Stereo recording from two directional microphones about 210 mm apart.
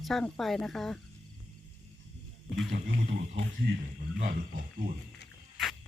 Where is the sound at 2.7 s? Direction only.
35° right (ahead or behind).